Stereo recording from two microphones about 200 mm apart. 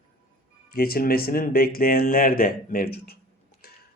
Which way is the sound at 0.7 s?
50° left (ahead or behind).